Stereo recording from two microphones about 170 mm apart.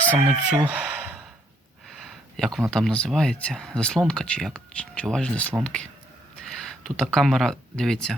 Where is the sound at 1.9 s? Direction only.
Centre (ahead or behind).